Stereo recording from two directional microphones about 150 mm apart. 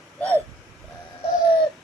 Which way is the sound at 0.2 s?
10° left (ahead or behind).